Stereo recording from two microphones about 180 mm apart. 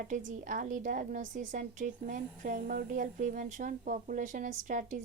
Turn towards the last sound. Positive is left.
turn(degrees=-45)  # may be behind; listen again after turning